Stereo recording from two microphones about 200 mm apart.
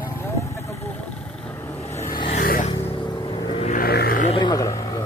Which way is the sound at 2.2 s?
40° left (ahead or behind).